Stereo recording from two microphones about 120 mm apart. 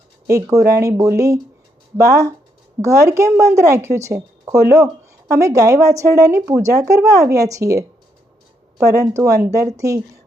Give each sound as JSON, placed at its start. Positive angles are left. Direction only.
{"t": 0.3, "sound": "speech", "side_deg": -25}
{"t": 8.9, "sound": "speech", "side_deg": -30}